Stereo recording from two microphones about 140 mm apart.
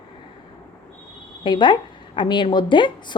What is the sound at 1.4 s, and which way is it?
A woman's voice, 35° left (ahead or behind).